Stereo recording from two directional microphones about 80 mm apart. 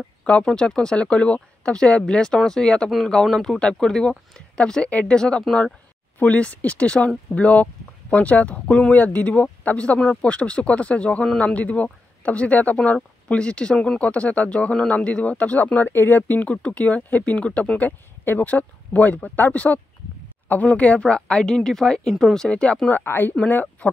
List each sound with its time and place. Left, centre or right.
0.2 s speech: centre
22.8 s a woman's voice: left